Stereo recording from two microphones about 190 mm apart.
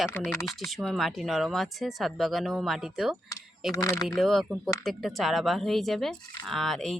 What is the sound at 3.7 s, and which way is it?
Speech, 15° left (ahead or behind).